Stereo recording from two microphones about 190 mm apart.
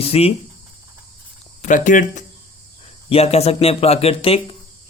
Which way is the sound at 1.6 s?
40° left (ahead or behind).